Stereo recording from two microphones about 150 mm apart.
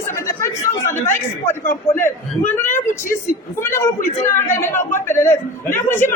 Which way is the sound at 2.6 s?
15° left (ahead or behind).